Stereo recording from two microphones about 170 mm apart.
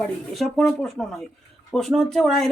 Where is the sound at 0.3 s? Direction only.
Centre (ahead or behind).